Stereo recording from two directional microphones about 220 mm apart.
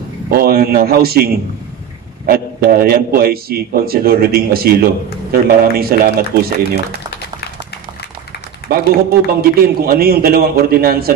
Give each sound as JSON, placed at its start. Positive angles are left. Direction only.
{"t": 0.3, "sound": "a man's voice", "side_deg": -45}
{"t": 9.3, "sound": "a man's voice", "side_deg": -45}